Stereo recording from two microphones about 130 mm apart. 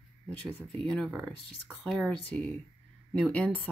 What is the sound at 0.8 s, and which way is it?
Speech, 5° left (ahead or behind).